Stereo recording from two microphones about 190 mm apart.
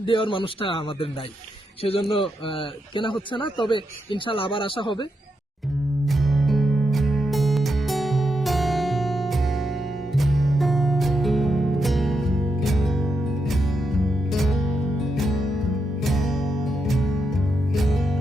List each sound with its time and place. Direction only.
0.0 s speech: 25° left (ahead or behind)
6.1 s music: centre (ahead or behind)